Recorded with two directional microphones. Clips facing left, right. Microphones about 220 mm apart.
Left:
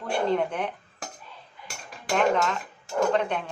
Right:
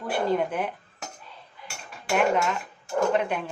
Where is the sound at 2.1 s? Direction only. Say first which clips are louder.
Even; 10° right (ahead or behind).